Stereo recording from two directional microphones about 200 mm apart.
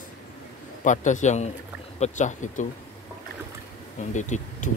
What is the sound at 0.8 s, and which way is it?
Speech, 40° left (ahead or behind).